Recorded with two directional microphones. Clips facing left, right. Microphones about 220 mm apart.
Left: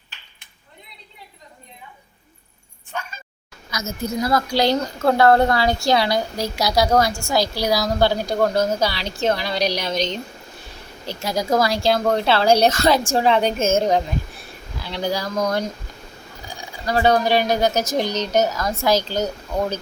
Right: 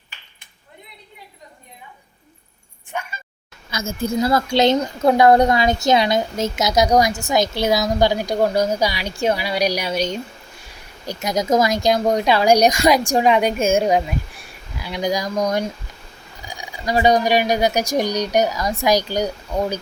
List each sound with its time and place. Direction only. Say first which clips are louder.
3.7 s a woman's voice: right 3 dB; 30° right (ahead or behind); by 19.8 s 15° right (ahead or behind)